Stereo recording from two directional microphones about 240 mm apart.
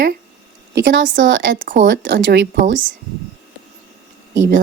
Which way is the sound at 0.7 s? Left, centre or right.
Right.